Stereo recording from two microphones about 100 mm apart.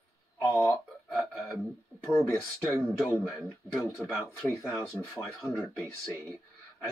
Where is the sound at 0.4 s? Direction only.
25° left (ahead or behind).